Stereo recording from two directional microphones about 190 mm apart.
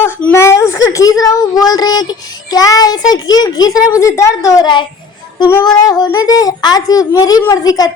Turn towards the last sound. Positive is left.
turn(degrees=20)  # may be behind; listen again after turning